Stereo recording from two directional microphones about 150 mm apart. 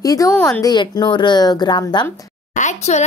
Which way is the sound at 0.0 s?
25° left (ahead or behind).